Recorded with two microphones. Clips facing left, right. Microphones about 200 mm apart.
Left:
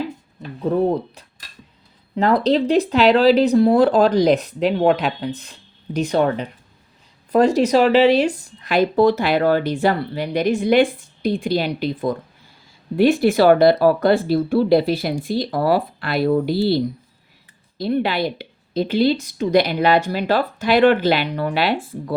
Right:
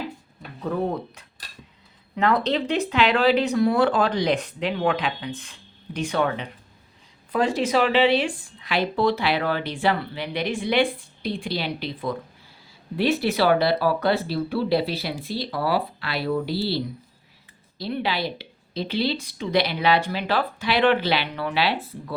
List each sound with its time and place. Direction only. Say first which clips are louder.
0.6 s speech: left 7 dB; 30° left (ahead or behind); by 21.8 s 50° left (ahead or behind)